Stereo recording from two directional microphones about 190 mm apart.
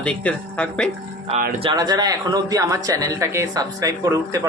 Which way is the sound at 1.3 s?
35° right (ahead or behind).